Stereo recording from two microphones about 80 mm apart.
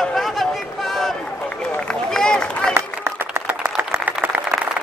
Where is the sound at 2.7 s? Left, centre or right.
Right.